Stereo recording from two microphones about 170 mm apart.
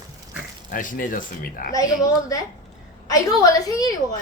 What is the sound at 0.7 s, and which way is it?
Speech, 55° left (ahead or behind).